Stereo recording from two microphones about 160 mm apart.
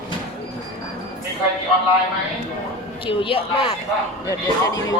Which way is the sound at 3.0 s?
35° left (ahead or behind).